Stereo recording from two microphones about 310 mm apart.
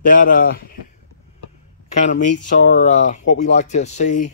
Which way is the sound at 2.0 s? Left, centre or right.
Left.